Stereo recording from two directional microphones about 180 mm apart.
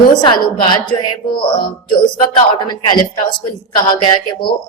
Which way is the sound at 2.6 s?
25° left (ahead or behind).